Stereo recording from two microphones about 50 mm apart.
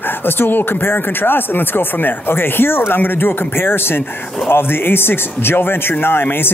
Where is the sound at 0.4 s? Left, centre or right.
Left.